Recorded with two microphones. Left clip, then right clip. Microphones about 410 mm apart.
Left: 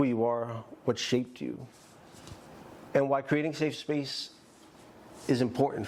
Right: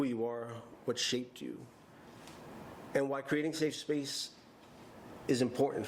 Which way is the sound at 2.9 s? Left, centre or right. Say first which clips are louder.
Left 7 dB; left.